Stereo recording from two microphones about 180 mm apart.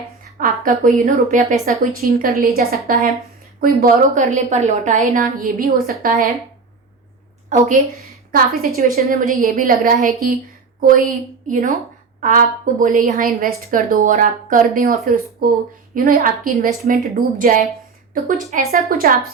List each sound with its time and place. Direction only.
0.3 s a woman's voice: 45° right (ahead or behind)
5.2 s a woman's voice: 50° right (ahead or behind)
8.3 s a woman's voice: 55° right (ahead or behind)